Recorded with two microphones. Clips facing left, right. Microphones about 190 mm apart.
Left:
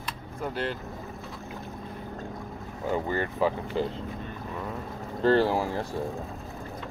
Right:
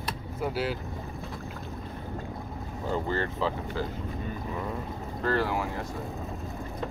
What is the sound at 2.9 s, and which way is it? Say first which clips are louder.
Speech: left 1 dB; 15° left (ahead or behind).